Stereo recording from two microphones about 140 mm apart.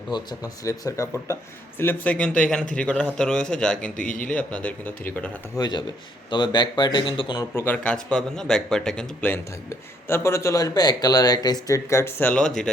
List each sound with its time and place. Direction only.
0.1 s speech: 25° left (ahead or behind)
1.8 s speech: 10° left (ahead or behind)
3.9 s a man's voice: 70° left (ahead or behind)
4.3 s speech: 10° left (ahead or behind)
5.5 s speech: 30° left (ahead or behind)
7.5 s speech: 15° left (ahead or behind)